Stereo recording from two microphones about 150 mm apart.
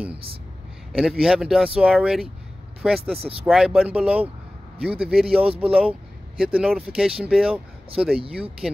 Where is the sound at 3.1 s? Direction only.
40° right (ahead or behind).